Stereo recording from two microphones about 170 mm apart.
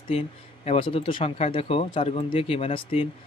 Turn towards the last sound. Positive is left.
turn(degrees=35)  # may be behind; listen again after turning